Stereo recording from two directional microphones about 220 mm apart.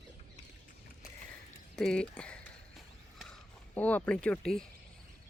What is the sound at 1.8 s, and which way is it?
Speech, 5° left (ahead or behind).